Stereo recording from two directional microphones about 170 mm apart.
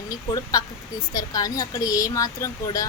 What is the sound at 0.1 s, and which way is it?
A woman's voice, 20° left (ahead or behind).